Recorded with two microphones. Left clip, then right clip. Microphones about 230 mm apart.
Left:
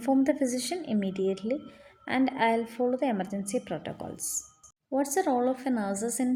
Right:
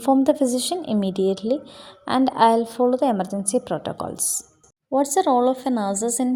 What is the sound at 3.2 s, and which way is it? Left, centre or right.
A woman's voice, right.